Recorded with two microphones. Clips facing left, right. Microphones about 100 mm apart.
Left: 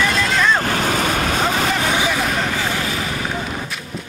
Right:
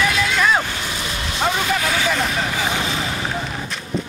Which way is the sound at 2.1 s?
Centre (ahead or behind).